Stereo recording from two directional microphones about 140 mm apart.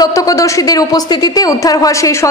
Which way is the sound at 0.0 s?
25° left (ahead or behind).